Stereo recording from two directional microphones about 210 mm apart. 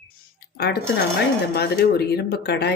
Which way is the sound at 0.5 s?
50° left (ahead or behind).